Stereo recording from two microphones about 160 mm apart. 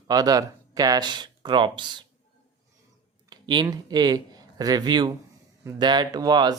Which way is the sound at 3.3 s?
25° right (ahead or behind).